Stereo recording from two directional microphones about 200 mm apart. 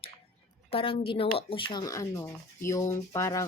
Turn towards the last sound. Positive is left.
turn(degrees=15)  # may be behind; listen again after turning